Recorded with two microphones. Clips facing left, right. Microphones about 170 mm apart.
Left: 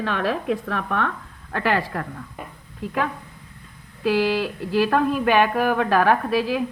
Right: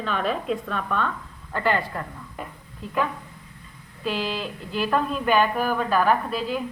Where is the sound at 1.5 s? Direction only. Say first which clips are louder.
Left 2 dB; 80° left.